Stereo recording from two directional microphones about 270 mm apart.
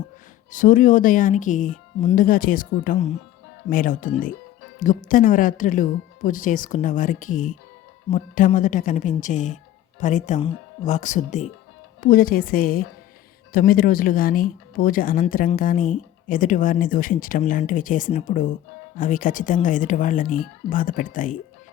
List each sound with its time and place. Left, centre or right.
0.5 s speech: left